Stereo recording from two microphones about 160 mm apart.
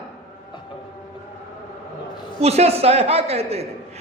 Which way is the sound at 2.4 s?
40° right (ahead or behind).